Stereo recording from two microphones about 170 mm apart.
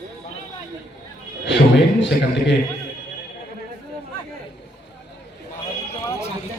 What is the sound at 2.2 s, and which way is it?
Speech, 90° left.